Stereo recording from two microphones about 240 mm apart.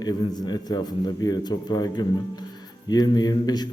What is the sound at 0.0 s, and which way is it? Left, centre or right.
A man's voice, centre.